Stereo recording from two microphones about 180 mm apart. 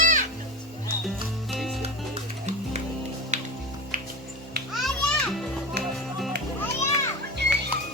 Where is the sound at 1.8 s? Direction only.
35° right (ahead or behind).